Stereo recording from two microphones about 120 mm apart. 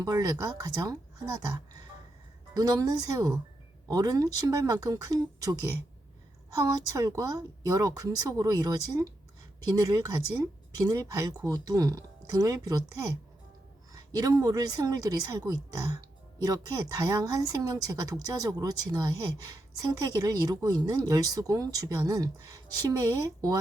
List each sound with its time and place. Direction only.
0.0 s speech: 30° right (ahead or behind)